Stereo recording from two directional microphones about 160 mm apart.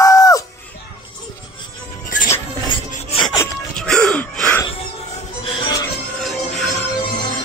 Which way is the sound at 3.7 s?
5° left (ahead or behind).